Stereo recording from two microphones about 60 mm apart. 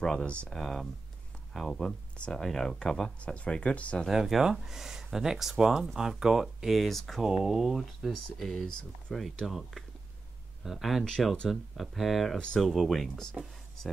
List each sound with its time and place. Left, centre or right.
0.0 s speech: centre
0.6 s speech: centre
2.4 s speech: centre; by 4.0 s left
4.1 s speech: centre
7.2 s speech: centre